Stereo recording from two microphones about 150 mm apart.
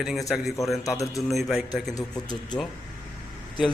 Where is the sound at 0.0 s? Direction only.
Centre (ahead or behind).